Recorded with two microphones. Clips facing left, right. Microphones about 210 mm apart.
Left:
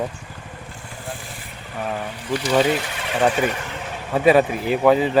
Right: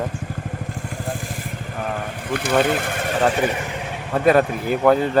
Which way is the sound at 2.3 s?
55° right (ahead or behind).